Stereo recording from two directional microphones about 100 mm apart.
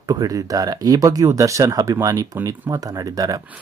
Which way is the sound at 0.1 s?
40° right (ahead or behind).